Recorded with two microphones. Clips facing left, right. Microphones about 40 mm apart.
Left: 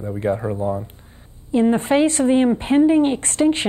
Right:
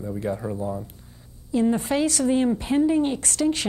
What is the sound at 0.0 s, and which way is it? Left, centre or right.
Speech, left.